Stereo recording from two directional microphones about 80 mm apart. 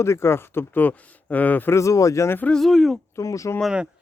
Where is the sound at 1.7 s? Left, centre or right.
Left.